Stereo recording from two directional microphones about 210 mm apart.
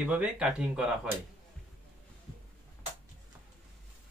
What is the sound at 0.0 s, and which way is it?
Speech, 5° right (ahead or behind).